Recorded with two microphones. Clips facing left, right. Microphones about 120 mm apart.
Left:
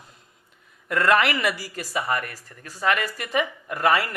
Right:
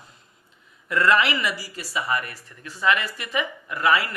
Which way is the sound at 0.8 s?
50° left (ahead or behind).